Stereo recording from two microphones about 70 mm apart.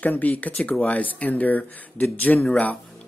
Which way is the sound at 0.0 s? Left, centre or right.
Left.